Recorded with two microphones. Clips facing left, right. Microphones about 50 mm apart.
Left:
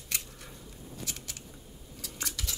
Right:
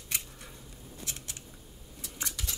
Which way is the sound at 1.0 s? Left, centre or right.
Right.